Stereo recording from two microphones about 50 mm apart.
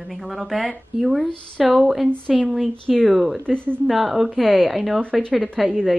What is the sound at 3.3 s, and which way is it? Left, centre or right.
Speech, centre.